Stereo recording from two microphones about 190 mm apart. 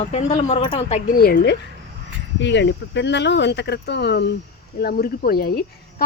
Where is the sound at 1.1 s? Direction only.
55° left (ahead or behind).